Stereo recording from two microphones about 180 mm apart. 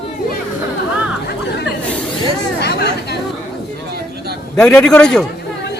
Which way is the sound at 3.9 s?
65° right (ahead or behind).